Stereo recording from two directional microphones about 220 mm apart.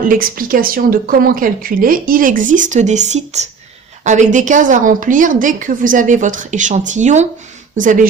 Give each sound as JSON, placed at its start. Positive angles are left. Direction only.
{"t": 0.1, "sound": "speech", "side_deg": -40}